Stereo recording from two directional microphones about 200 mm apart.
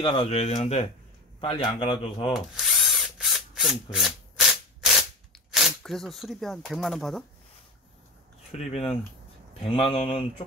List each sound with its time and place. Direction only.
0.0 s speech: 25° left (ahead or behind)
2.3 s drill: centre (ahead or behind)
8.5 s speech: 30° left (ahead or behind)